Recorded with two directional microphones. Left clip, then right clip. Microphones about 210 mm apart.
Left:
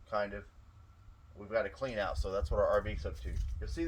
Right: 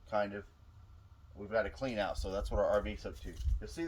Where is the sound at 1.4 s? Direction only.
15° right (ahead or behind).